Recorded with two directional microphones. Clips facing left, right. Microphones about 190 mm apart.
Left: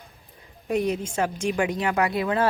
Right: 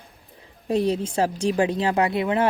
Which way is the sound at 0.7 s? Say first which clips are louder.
Right 3 dB; 30° right (ahead or behind).